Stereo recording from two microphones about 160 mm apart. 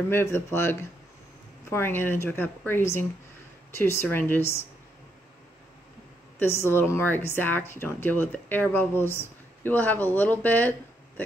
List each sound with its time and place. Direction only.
0.1 s a woman's voice: 15° left (ahead or behind)
6.4 s a woman's voice: 15° left (ahead or behind)